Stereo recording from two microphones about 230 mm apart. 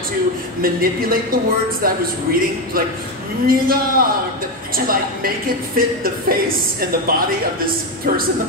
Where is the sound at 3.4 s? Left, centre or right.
Right.